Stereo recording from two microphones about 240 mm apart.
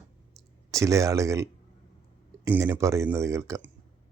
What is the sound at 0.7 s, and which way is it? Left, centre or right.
Speech, centre.